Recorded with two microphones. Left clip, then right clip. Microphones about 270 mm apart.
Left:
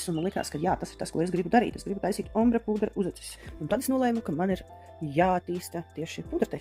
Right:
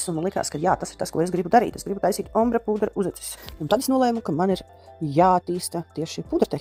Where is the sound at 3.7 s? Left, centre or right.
Right.